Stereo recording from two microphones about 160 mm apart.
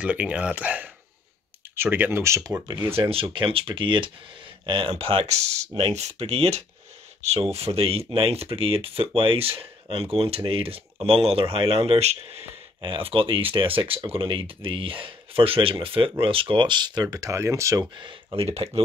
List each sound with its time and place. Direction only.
0.0 s speech: 5° right (ahead or behind); by 3.1 s 20° right (ahead or behind)
3.1 s speech: 35° right (ahead or behind)